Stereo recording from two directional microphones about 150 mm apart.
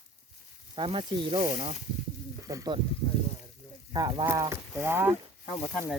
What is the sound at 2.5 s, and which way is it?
Speech, 25° right (ahead or behind).